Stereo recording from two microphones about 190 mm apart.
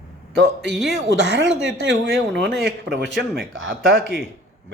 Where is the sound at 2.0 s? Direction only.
65° right (ahead or behind).